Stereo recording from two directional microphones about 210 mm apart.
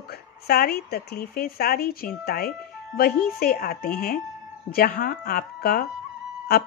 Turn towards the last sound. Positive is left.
turn(degrees=50)  # may be behind; listen again after turning